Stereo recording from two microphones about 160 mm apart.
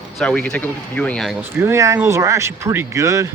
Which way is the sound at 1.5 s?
15° right (ahead or behind).